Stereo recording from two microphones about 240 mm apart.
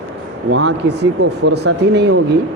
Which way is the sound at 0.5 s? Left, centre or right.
Right.